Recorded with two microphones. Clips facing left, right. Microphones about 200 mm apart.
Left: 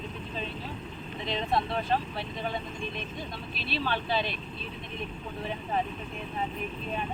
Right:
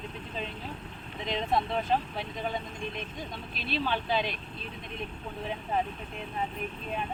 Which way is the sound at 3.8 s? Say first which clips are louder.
Even; 15° right (ahead or behind).